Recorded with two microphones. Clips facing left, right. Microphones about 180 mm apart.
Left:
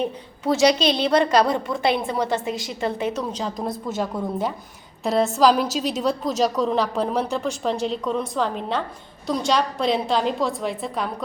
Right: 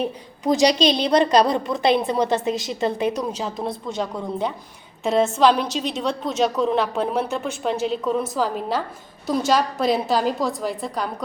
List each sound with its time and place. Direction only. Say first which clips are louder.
0.0 s a woman's voice: right 1 dB; 15° right (ahead or behind); by 11.1 s centre (ahead or behind)